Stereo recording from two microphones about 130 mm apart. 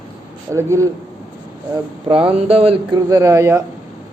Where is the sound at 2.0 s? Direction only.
45° right (ahead or behind).